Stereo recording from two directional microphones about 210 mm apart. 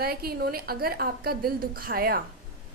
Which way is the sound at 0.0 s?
45° right (ahead or behind).